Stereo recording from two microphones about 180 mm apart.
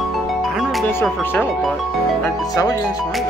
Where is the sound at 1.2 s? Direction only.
10° left (ahead or behind).